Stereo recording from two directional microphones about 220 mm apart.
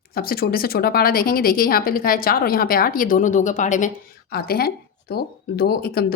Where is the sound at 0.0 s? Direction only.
45° left (ahead or behind).